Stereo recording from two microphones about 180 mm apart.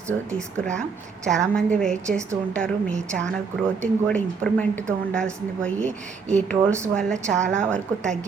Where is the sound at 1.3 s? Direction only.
5° left (ahead or behind).